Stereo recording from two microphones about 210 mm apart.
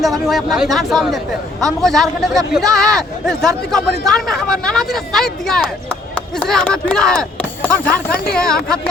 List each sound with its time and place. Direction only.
0.0 s speech: centre (ahead or behind)
8.1 s speech: 45° left (ahead or behind)
8.4 s speech: 5° left (ahead or behind)